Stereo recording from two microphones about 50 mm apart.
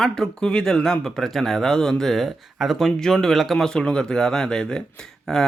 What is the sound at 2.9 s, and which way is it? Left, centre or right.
Speech, centre.